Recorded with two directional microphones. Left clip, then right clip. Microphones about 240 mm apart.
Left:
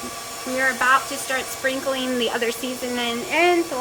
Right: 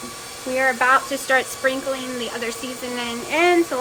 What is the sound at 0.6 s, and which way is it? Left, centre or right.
Speech, centre.